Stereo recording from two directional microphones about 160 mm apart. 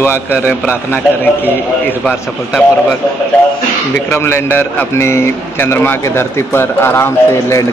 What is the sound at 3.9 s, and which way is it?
Speech, 15° left (ahead or behind).